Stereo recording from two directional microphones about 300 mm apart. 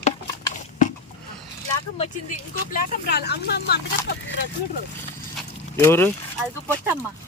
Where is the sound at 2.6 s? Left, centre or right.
Left.